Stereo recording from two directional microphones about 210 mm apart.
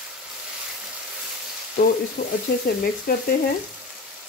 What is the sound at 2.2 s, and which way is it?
Frying, 35° left (ahead or behind).